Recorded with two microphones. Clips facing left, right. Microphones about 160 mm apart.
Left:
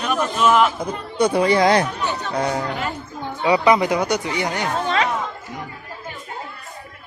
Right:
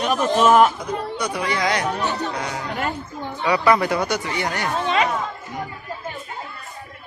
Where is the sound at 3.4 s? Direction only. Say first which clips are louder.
Left 2 dB; 20° left (ahead or behind).